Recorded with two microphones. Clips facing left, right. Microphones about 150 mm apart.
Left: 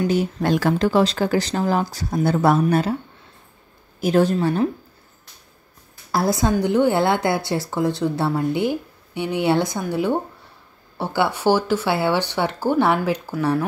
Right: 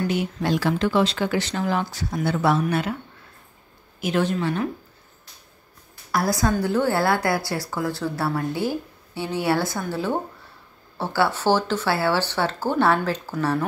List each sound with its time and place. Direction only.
0.1 s speech: 40° left (ahead or behind)
2.6 s speech: 35° left (ahead or behind)
4.0 s speech: 40° left (ahead or behind)
6.1 s a woman's voice: 25° left (ahead or behind)